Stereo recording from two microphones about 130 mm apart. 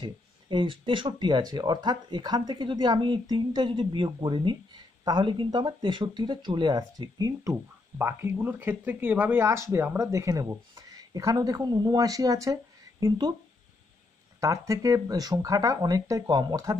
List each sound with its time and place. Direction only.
0.0 s speech: 35° right (ahead or behind)
14.4 s speech: 25° right (ahead or behind)